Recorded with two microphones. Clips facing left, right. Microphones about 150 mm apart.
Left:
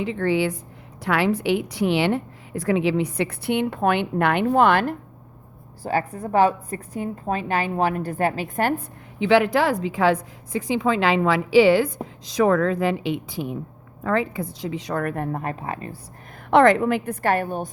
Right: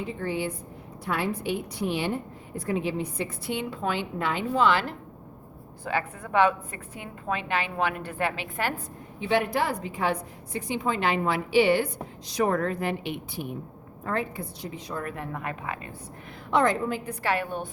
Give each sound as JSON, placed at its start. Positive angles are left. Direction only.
{"t": 0.0, "sound": "a woman's voice", "side_deg": 90}
{"t": 5.8, "sound": "a woman's voice", "side_deg": 40}
{"t": 9.1, "sound": "a woman's voice", "side_deg": 90}
{"t": 16.5, "sound": "a woman's voice", "side_deg": 70}
{"t": 17.1, "sound": "a woman's voice", "side_deg": 45}